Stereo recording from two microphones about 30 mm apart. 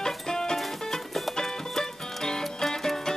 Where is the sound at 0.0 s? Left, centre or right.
Left.